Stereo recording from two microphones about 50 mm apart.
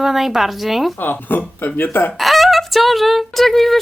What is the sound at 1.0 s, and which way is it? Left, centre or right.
Speech, left.